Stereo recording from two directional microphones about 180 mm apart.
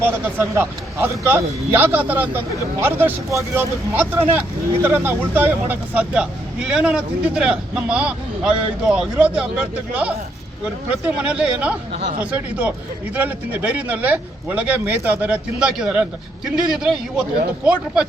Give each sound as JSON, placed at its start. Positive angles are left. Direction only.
{"t": 0.0, "sound": "a man's voice", "side_deg": -15}